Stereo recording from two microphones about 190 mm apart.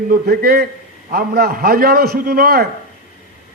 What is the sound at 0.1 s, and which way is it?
A man's voice, 50° right (ahead or behind).